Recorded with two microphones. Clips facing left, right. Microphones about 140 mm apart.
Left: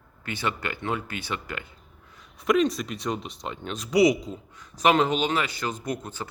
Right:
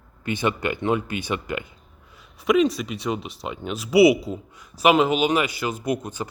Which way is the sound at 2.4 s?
Centre (ahead or behind).